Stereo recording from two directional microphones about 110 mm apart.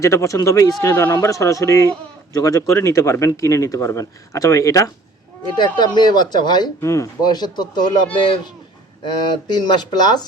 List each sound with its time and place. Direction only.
0.0 s speech: 30° left (ahead or behind)
5.5 s speech: 40° left (ahead or behind)
6.8 s speech: 30° left (ahead or behind); by 8.4 s 45° left (ahead or behind)
9.5 s speech: 40° left (ahead or behind)